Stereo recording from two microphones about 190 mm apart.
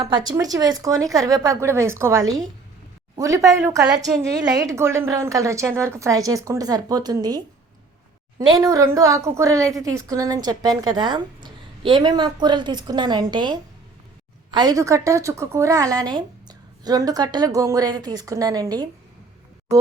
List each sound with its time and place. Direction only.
0.0 s a woman's voice: 20° right (ahead or behind)